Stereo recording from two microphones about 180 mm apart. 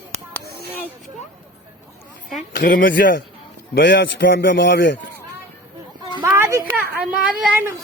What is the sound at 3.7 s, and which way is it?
A man's voice, 75° left (ahead or behind).